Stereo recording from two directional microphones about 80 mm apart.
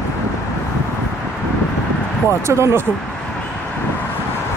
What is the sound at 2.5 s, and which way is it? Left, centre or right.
Speech, right.